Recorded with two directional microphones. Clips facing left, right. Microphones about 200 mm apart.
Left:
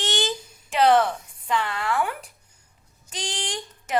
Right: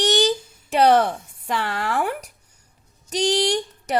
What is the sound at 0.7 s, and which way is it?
Speech, 40° right (ahead or behind).